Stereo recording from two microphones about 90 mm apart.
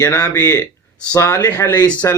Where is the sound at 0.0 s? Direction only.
30° left (ahead or behind).